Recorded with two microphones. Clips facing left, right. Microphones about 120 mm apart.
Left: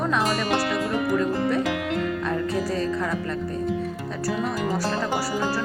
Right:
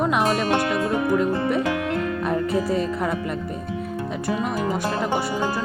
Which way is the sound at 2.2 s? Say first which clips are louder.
Right 3 dB; 20° right (ahead or behind).